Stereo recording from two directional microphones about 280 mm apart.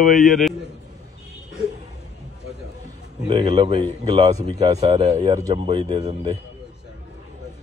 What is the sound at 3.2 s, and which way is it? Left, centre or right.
Speech, centre.